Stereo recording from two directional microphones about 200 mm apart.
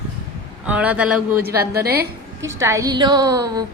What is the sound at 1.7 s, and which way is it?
Speech, 50° right (ahead or behind).